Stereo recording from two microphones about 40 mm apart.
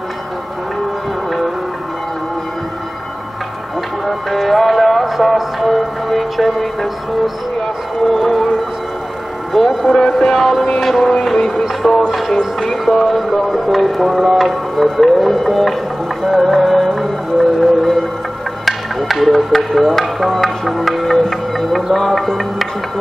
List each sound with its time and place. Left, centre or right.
4.0 s music: centre
9.5 s music: centre
9.8 s music: centre
10.1 s music: centre
12.3 s music: centre
18.7 s speech: centre
21.9 s music: centre